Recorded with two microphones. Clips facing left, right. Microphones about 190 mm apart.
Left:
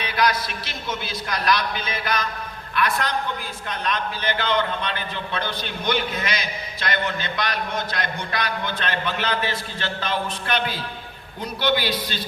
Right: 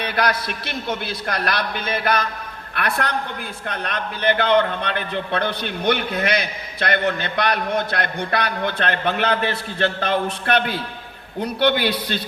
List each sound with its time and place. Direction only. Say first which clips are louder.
0.0 s a man's voice: right 1 dB; 60° right (ahead or behind)